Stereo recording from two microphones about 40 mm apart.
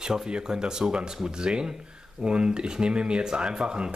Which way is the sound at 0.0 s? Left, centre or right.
Centre.